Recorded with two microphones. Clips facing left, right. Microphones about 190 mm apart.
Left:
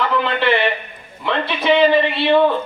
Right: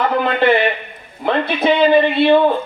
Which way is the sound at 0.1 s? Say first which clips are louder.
Right 3 dB; 45° right (ahead or behind).